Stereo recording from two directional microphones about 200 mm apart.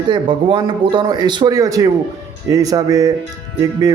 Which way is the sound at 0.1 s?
25° right (ahead or behind).